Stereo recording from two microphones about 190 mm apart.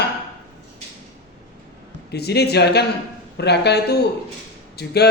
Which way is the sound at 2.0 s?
60° left (ahead or behind).